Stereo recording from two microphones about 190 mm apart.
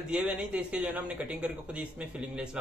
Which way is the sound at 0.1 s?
5° right (ahead or behind).